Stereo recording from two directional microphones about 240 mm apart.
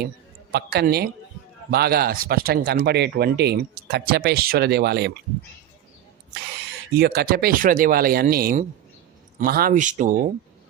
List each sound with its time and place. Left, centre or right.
0.5 s speech: right
6.9 s speech: right